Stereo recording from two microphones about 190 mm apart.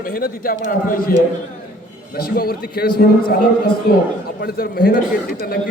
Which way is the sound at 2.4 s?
55° left (ahead or behind).